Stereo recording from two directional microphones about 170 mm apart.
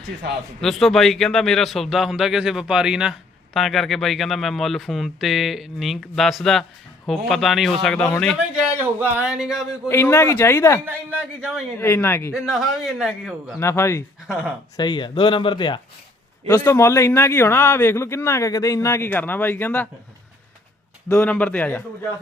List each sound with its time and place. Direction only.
0.6 s a man's voice: centre (ahead or behind)
8.8 s a man's voice: 10° right (ahead or behind)
9.9 s a man's voice: 15° left (ahead or behind)
10.8 s a man's voice: 10° right (ahead or behind)
11.8 s a man's voice: 15° left (ahead or behind)
12.5 s a man's voice: centre (ahead or behind)
13.6 s a man's voice: 15° left (ahead or behind)
14.3 s a man's voice: 5° right (ahead or behind)
14.8 s speech: 25° left (ahead or behind)
16.5 s a man's voice: 15° left (ahead or behind)
21.1 s a man's voice: 10° left (ahead or behind)